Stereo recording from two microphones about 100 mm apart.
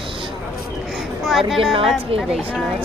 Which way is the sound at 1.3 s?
Centre (ahead or behind).